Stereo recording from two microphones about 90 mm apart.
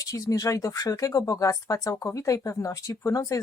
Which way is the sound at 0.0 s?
40° left (ahead or behind).